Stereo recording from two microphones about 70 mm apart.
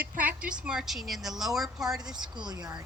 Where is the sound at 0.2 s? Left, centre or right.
Centre.